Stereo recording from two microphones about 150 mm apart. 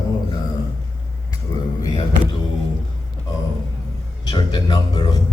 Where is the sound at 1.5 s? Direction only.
25° left (ahead or behind).